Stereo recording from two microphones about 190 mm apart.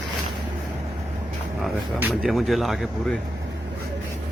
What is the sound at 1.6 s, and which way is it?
Speech, centre (ahead or behind).